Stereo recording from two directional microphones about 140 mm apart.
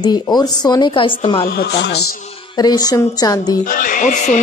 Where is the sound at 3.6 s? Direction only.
70° left (ahead or behind).